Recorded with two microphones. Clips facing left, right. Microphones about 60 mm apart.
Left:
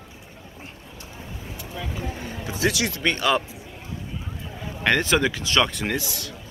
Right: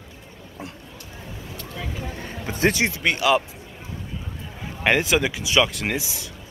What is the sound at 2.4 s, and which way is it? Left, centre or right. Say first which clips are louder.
Speech: right 3 dB; right.